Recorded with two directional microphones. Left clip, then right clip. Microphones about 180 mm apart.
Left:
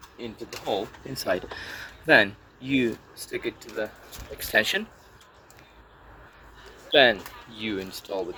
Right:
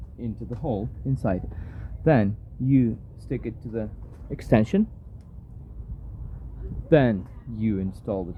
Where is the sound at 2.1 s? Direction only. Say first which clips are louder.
Left 6 dB; 10° right (ahead or behind).